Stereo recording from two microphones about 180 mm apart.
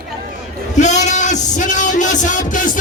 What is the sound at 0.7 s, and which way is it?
A man's voice, 40° left (ahead or behind).